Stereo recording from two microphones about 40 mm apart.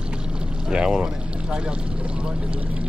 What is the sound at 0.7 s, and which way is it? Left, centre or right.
Speech, centre.